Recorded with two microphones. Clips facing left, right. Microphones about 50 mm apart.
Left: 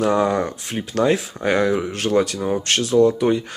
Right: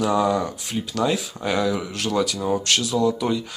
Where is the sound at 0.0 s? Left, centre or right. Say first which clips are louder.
Left 2 dB; left.